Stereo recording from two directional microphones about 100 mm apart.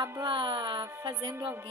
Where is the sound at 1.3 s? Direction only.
20° right (ahead or behind).